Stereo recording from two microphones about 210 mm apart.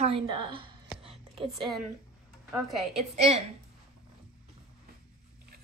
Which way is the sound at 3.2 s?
30° right (ahead or behind).